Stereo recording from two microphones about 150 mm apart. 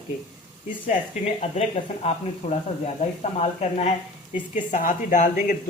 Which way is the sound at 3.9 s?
60° left (ahead or behind).